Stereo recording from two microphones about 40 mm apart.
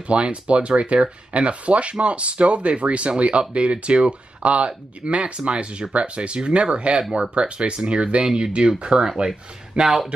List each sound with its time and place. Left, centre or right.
0.0 s speech: right
9.8 s speech: right